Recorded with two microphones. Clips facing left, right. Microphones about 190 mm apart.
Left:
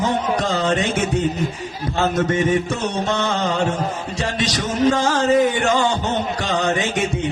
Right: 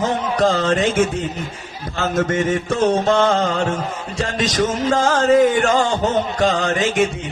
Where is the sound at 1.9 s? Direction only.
30° left (ahead or behind).